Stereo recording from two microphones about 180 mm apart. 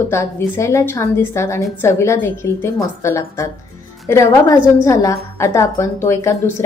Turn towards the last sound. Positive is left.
turn(degrees=15)  # may be behind; listen again after turning